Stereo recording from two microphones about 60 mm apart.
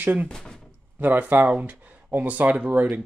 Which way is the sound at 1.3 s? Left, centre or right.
Right.